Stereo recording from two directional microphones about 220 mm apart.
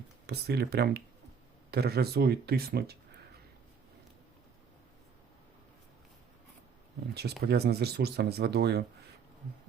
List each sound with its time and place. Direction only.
0.3 s speech: 45° right (ahead or behind)
7.1 s speech: 45° right (ahead or behind)